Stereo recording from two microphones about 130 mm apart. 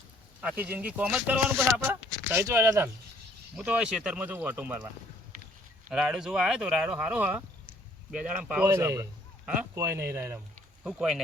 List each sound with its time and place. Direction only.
0.4 s speech: 15° right (ahead or behind)
3.6 s speech: 5° right (ahead or behind)
5.9 s speech: 5° right (ahead or behind)
8.7 s speech: 20° right (ahead or behind)
10.8 s speech: centre (ahead or behind)